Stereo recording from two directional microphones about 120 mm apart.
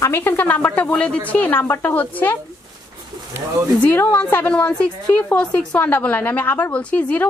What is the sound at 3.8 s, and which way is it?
A woman's voice, 15° left (ahead or behind).